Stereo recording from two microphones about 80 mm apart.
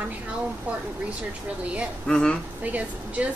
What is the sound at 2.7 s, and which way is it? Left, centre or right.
Speech, centre.